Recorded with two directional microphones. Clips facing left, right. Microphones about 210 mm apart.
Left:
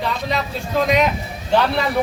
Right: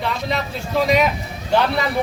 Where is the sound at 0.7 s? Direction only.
5° right (ahead or behind).